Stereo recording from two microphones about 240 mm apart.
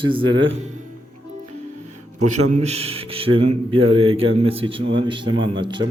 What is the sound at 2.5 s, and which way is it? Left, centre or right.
Speech, right.